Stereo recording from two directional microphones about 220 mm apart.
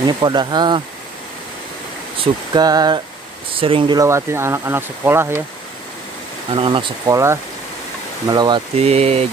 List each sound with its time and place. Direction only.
0.0 s speech: 20° right (ahead or behind)
2.1 s speech: 20° right (ahead or behind)
6.5 s speech: 20° right (ahead or behind)